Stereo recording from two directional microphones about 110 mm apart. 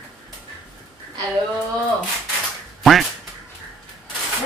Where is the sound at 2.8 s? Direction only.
Centre (ahead or behind).